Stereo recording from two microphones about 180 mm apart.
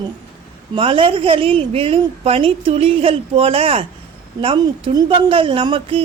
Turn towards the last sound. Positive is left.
turn(degrees=-30)  # may be behind; listen again after turning